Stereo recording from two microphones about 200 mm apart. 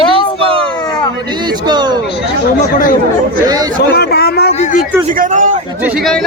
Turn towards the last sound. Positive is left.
turn(degrees=0)  # may be behind; listen again after turning